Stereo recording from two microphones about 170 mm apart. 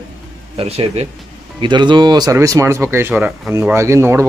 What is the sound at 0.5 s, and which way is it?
Speech, 35° right (ahead or behind).